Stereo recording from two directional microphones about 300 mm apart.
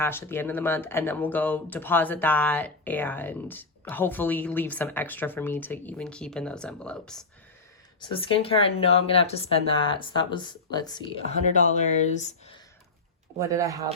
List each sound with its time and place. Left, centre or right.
0.0 s speech: centre
8.0 s speech: centre
13.4 s speech: centre